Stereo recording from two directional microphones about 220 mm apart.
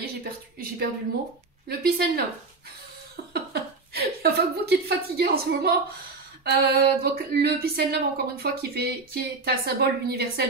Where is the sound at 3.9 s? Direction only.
45° right (ahead or behind).